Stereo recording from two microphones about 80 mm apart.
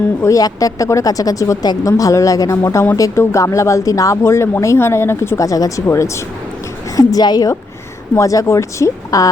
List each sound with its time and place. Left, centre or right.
0.2 s speech: left
5.4 s speech: left
6.9 s speech: left
8.1 s speech: left